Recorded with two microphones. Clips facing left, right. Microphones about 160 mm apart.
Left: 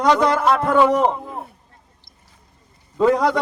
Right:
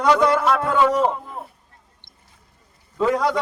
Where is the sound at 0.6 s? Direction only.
20° left (ahead or behind).